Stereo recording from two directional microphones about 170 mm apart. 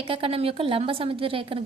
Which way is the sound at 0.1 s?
35° right (ahead or behind).